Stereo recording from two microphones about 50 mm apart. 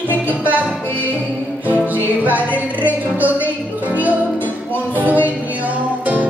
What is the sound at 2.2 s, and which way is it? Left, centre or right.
Music, right.